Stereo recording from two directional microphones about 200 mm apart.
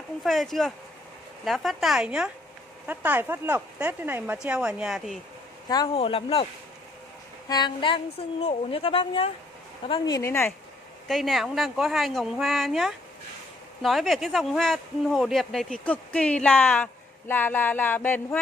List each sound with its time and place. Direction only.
0.2 s speech: centre (ahead or behind)
5.7 s a woman's voice: 25° left (ahead or behind)
7.4 s a woman's voice: 20° left (ahead or behind)
11.1 s speech: centre (ahead or behind)